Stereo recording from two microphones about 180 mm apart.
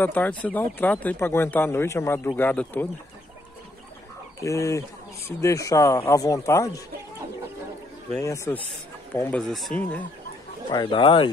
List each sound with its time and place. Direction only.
0.0 s speech: 10° left (ahead or behind)
4.4 s speech: 15° left (ahead or behind)
8.1 s speech: 15° left (ahead or behind)
10.7 s speech: 25° left (ahead or behind)